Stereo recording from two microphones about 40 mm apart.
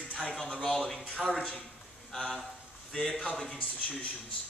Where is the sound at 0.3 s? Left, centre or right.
Centre.